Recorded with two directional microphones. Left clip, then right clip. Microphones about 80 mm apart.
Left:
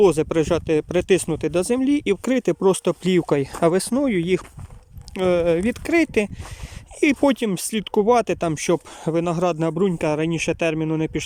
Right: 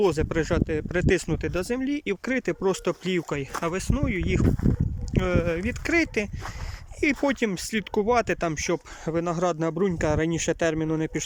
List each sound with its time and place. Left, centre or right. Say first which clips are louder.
0.0 s speech: left 7 dB; left
5.1 s speech: left 7 dB; left
5.6 s speech: left 4 dB; left